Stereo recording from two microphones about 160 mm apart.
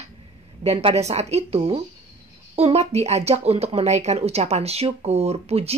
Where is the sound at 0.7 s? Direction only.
40° right (ahead or behind).